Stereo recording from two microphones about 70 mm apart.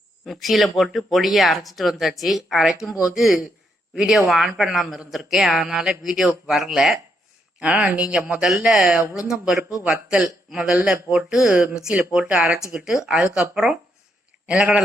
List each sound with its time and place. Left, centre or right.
0.3 s speech: centre
7.6 s speech: centre